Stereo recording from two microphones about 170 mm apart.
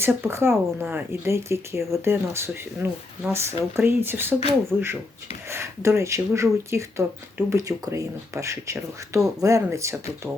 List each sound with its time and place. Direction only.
0.0 s speech: 15° right (ahead or behind)